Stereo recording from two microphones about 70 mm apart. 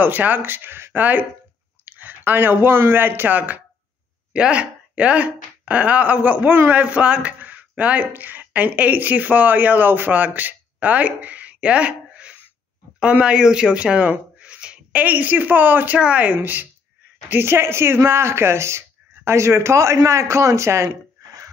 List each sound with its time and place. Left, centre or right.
0.0 s speech: right